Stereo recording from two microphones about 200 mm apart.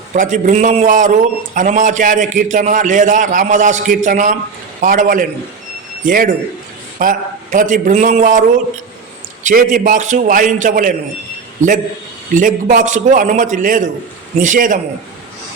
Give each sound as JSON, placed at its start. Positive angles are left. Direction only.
{"t": 0.1, "sound": "a man's voice", "side_deg": -40}
{"t": 12.3, "sound": "a man's voice", "side_deg": -40}